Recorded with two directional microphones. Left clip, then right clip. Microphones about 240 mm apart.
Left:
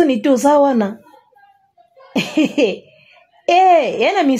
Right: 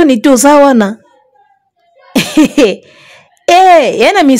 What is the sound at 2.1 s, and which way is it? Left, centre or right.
Speech, right.